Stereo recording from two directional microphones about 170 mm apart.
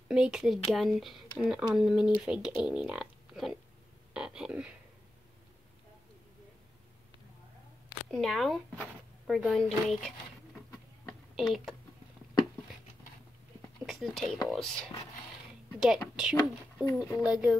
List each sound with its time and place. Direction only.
0.1 s speech: 5° right (ahead or behind)
4.1 s a sound: 5° right (ahead or behind)
8.1 s speech: centre (ahead or behind)
11.1 s a sound: centre (ahead or behind)
13.8 s speech: centre (ahead or behind)
16.2 s speech: 5° right (ahead or behind)